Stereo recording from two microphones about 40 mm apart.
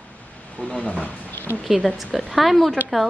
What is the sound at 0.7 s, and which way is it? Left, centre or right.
Speech, left.